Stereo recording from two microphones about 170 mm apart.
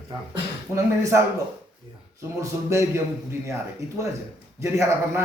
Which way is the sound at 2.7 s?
15° right (ahead or behind).